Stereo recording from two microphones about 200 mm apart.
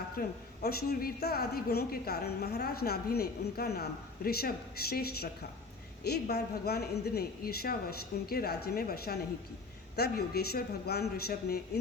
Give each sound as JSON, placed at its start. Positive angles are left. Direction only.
{"t": 0.2, "sound": "a woman's voice", "side_deg": 50}